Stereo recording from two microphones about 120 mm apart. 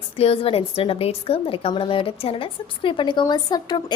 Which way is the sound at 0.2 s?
55° left (ahead or behind).